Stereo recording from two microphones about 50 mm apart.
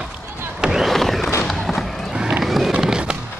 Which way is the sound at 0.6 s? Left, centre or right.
Centre.